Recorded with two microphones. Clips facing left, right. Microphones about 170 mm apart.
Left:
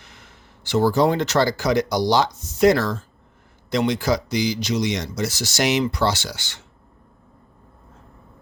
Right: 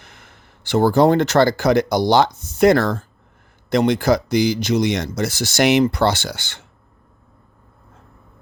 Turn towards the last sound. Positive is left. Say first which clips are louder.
# right 4 dB
turn(degrees=-55)  # may be behind; listen again after turning